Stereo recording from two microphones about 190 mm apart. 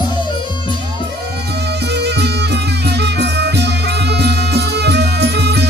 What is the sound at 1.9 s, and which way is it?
Music, 60° right (ahead or behind).